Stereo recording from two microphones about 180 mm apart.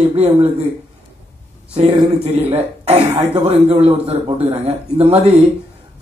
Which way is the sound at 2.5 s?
35° right (ahead or behind).